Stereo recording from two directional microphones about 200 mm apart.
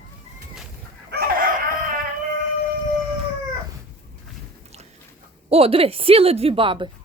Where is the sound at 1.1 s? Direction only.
50° right (ahead or behind).